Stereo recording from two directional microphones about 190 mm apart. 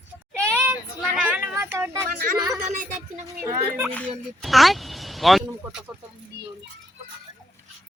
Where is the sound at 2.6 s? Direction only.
40° right (ahead or behind).